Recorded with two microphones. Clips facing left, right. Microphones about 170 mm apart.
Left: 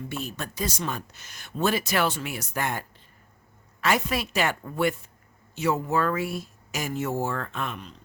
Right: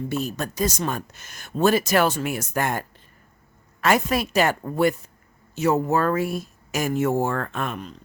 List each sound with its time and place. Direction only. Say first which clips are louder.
0.1 s a woman's voice: right 7 dB; 40° right (ahead or behind)